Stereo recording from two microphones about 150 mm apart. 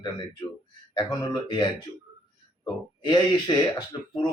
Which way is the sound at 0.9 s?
30° left (ahead or behind).